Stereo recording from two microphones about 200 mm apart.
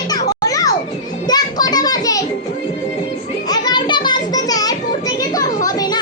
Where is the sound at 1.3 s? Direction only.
20° left (ahead or behind).